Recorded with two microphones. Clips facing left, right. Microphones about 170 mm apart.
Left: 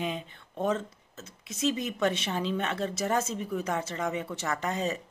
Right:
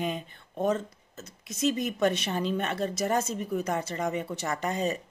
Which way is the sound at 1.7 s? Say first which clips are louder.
Right 2 dB; 45° right (ahead or behind).